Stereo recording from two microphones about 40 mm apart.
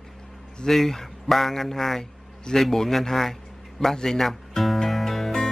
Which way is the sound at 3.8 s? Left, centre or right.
Centre.